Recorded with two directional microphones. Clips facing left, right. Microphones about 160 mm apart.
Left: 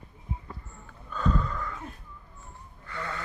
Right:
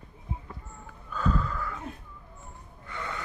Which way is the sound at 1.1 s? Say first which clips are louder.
Even; 5° right (ahead or behind).